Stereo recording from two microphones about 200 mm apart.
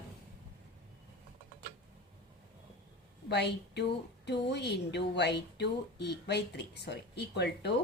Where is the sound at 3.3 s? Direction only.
55° left (ahead or behind).